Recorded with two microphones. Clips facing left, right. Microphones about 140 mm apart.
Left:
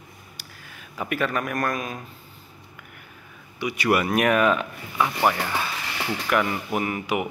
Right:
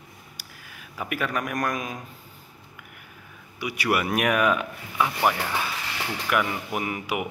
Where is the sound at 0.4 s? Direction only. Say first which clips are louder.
Left 1 dB; 10° right (ahead or behind).